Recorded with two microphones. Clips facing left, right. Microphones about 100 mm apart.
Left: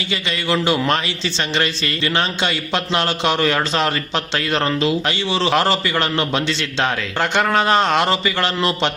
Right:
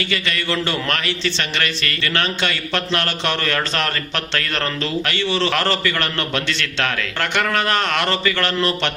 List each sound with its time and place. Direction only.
0.0 s a man's voice: 20° left (ahead or behind)